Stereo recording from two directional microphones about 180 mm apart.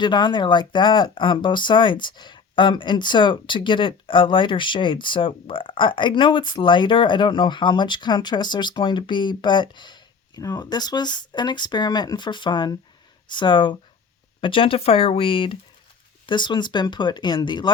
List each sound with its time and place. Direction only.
0.0 s speech: 25° left (ahead or behind)